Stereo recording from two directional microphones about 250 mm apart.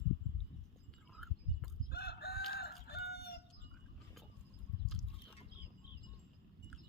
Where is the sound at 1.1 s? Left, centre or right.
Centre.